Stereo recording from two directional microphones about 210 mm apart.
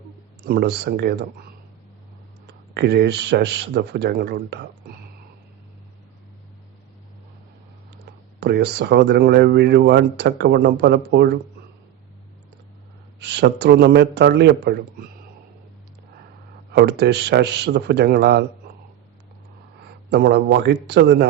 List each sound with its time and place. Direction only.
0.4 s speech: 50° right (ahead or behind)
2.5 s speech: 50° right (ahead or behind)
8.4 s speech: 50° right (ahead or behind)
13.1 s speech: 55° right (ahead or behind)
16.7 s speech: 50° right (ahead or behind)
20.1 s speech: 50° right (ahead or behind)